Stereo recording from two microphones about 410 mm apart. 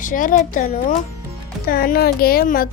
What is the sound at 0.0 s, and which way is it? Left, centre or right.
Speech, centre.